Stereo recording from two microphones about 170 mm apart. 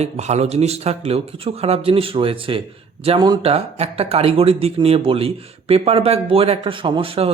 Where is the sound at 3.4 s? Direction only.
35° right (ahead or behind).